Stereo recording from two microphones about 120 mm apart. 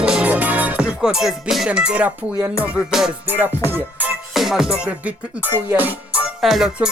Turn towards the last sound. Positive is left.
turn(degrees=0)  # may be behind; listen again after turning